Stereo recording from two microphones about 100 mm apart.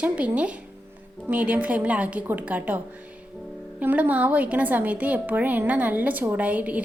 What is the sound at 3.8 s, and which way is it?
A woman's voice, 15° right (ahead or behind).